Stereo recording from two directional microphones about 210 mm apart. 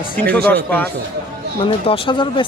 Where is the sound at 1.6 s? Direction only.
25° left (ahead or behind).